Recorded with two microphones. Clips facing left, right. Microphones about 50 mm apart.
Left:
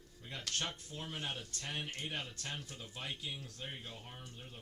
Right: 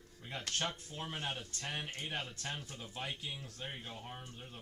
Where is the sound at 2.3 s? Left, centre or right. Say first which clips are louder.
Right 2 dB; centre.